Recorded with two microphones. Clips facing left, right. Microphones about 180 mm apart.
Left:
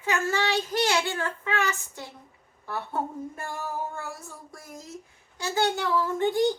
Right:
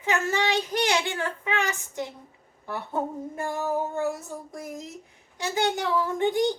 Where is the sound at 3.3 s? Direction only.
20° right (ahead or behind).